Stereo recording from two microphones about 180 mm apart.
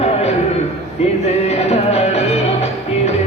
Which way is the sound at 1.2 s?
35° left (ahead or behind).